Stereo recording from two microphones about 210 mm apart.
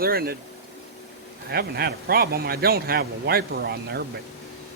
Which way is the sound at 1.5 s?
45° right (ahead or behind).